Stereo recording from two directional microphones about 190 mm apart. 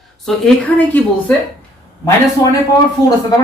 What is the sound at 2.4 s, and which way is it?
Speech, 15° left (ahead or behind).